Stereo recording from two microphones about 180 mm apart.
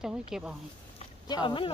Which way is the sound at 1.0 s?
25° left (ahead or behind).